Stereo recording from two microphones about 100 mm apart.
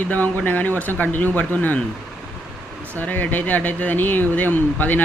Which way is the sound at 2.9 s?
15° left (ahead or behind).